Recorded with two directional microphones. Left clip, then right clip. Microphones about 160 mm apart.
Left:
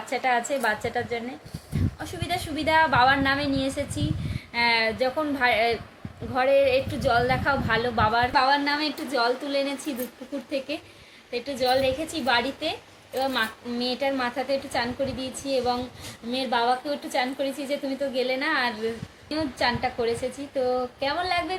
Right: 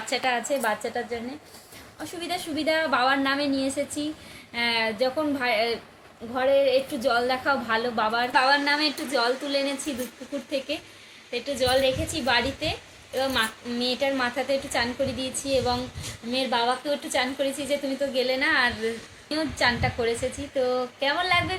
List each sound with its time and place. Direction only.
0.1 s a woman's voice: centre (ahead or behind)
2.2 s a woman's voice: 5° left (ahead or behind)